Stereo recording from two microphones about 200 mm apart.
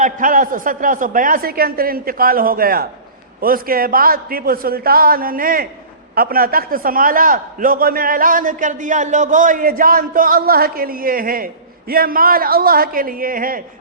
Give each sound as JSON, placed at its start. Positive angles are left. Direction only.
{"t": 0.0, "sound": "a man's voice", "side_deg": -40}